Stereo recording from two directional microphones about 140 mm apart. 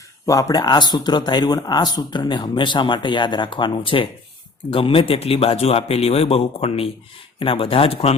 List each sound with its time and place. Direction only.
0.3 s speech: 25° left (ahead or behind); by 8.1 s 45° left (ahead or behind)